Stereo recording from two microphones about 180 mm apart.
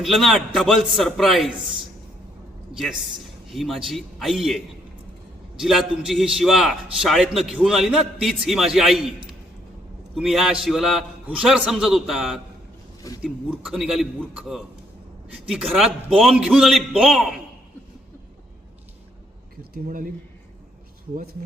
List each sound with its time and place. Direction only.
0.0 s a man's voice: centre (ahead or behind)
3.5 s a man's voice: centre (ahead or behind)
10.2 s a man's voice: centre (ahead or behind)
19.7 s speech: 50° right (ahead or behind)